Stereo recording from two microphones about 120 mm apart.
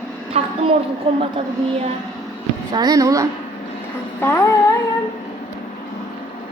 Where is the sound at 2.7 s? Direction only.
35° right (ahead or behind).